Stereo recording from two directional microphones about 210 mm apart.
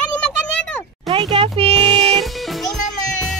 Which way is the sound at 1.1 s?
25° right (ahead or behind).